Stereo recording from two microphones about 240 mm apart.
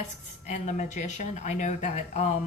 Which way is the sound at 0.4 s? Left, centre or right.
Left.